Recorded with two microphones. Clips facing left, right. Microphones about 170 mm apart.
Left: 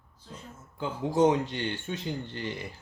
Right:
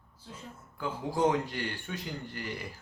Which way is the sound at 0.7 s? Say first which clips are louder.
Left 5 dB; 25° left (ahead or behind).